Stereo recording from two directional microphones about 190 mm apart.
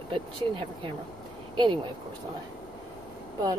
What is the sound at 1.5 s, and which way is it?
Speech, 25° right (ahead or behind).